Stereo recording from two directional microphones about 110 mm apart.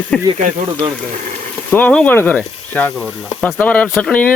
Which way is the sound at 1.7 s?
10° left (ahead or behind).